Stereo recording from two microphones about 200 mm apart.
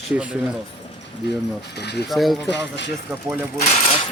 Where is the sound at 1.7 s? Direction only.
55° left (ahead or behind).